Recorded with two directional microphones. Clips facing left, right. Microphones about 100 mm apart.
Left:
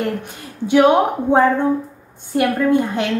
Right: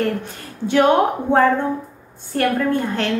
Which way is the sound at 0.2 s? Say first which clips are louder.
Even; 15° left (ahead or behind).